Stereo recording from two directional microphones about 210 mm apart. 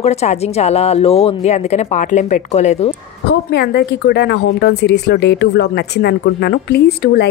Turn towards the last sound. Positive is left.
turn(degrees=50)  # may be behind; listen again after turning